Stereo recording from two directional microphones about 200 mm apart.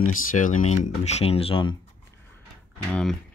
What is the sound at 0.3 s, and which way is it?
Speech, 40° left (ahead or behind).